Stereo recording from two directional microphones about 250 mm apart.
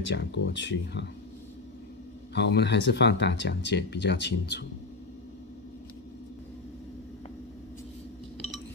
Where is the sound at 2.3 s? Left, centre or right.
Left.